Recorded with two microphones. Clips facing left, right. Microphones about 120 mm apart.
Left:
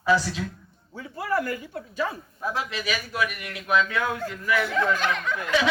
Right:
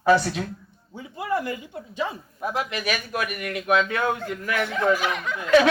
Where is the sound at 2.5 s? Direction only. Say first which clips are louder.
Right 4 dB; 55° right (ahead or behind).